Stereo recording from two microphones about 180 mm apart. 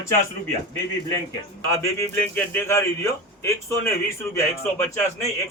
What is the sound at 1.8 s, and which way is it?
A man's voice, 15° left (ahead or behind).